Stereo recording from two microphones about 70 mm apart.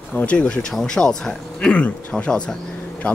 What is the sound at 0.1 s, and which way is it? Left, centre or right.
Speech, centre.